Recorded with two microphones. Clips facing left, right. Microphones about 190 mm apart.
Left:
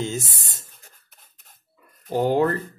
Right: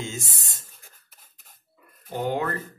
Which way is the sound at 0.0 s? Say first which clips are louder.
Left 6 dB; 35° left (ahead or behind).